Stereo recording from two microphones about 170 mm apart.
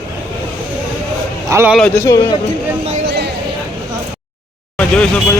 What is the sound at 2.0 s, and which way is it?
Speech, 20° left (ahead or behind).